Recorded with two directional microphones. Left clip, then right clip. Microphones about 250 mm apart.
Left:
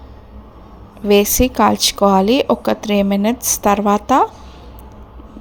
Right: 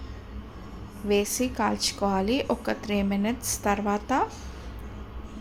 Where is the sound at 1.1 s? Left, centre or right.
Left.